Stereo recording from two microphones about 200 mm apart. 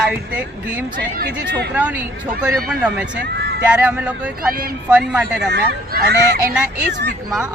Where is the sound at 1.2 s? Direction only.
55° right (ahead or behind).